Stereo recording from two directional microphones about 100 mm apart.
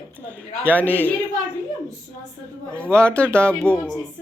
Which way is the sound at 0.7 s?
15° left (ahead or behind).